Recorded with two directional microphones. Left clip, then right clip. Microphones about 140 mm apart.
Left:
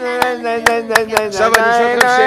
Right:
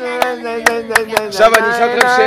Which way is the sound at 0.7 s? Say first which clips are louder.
Even; 55° left (ahead or behind).